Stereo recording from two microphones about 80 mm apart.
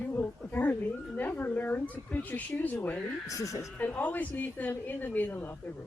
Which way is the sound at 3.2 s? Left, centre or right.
Left.